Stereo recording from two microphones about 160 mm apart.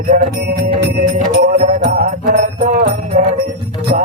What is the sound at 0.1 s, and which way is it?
Music, 70° right (ahead or behind).